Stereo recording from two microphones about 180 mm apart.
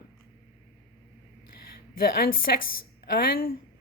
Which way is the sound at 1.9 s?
55° left (ahead or behind).